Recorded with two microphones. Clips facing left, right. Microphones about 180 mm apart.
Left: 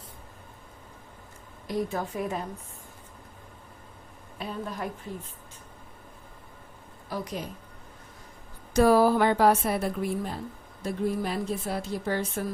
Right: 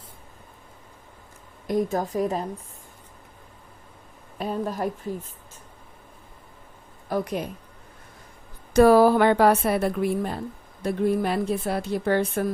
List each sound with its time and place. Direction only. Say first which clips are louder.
1.6 s a woman's voice: right 5 dB; 45° right (ahead or behind)
4.4 s a woman's voice: right 7 dB; 45° right (ahead or behind)
7.1 s a woman's voice: right 7 dB; 55° right (ahead or behind)
8.7 s a woman's voice: right 5 dB; 65° right (ahead or behind)